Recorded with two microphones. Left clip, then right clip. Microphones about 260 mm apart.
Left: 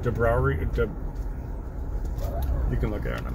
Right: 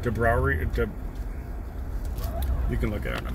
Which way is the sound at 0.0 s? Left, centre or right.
Right.